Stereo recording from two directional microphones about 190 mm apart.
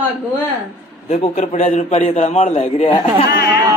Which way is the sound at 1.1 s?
35° left (ahead or behind).